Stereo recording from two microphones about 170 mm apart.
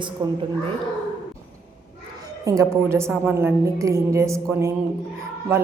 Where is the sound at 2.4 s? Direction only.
15° right (ahead or behind).